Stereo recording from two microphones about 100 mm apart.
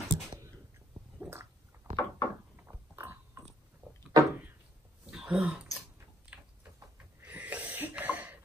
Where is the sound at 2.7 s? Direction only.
25° right (ahead or behind).